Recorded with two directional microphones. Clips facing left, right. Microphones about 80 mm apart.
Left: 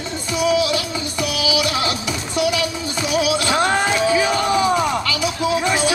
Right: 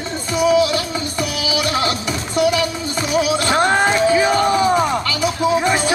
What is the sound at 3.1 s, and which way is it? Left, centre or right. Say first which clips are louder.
Music: right 2 dB; right.